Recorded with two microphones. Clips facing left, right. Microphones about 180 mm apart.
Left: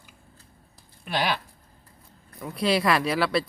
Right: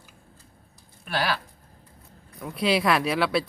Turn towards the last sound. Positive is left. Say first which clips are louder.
# even
turn(degrees=0)  # may be behind; listen again after turning